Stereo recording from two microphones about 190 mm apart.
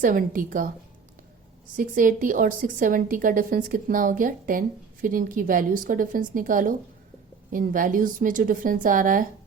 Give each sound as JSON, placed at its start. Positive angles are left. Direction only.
{"t": 0.0, "sound": "a woman's voice", "side_deg": -45}
{"t": 1.7, "sound": "a woman's voice", "side_deg": -45}